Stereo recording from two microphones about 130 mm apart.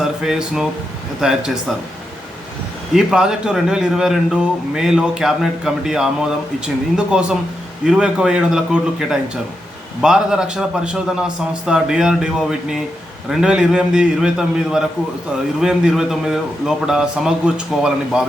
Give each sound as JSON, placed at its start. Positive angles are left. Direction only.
{"t": 0.0, "sound": "a man's voice", "side_deg": -5}
{"t": 2.9, "sound": "a man's voice", "side_deg": -5}